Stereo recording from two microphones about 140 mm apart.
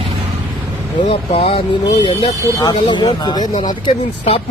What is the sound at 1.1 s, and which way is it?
Speech, 45° left (ahead or behind).